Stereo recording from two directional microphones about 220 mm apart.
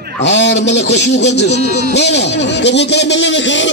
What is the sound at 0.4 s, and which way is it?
Speech, 50° left (ahead or behind).